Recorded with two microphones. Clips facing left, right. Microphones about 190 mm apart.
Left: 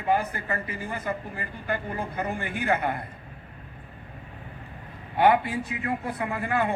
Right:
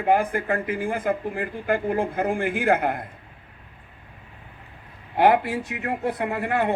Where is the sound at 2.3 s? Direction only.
90° right.